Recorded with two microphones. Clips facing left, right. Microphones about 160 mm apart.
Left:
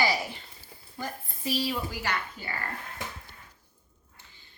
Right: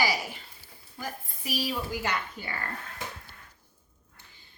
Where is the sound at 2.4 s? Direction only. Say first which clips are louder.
Even; 20° right (ahead or behind).